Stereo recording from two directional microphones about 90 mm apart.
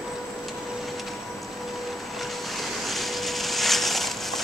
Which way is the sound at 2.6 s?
Centre (ahead or behind).